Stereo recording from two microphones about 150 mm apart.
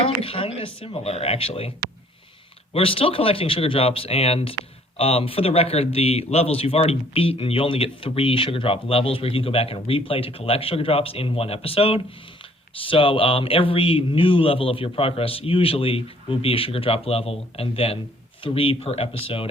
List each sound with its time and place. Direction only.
0.0 s a man's voice: 40° left (ahead or behind)
2.7 s a man's voice: 35° left (ahead or behind)